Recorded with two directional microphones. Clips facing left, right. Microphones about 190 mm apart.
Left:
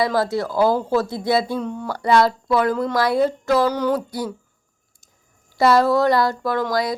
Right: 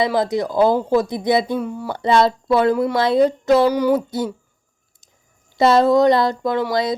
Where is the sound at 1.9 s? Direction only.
25° right (ahead or behind).